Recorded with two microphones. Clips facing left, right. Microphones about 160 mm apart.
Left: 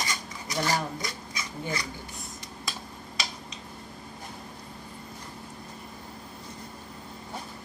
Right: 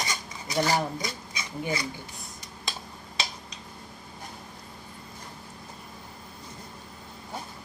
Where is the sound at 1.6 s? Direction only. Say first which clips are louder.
Right 3 dB; 25° right (ahead or behind).